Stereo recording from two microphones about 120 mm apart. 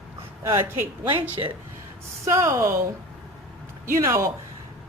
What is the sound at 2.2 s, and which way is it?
Speech, 25° right (ahead or behind).